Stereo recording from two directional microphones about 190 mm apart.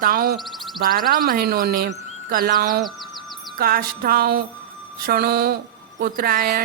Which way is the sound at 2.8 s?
Centre (ahead or behind).